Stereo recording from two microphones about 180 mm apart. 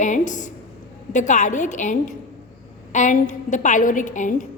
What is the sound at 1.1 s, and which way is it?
A woman's voice, 40° left (ahead or behind).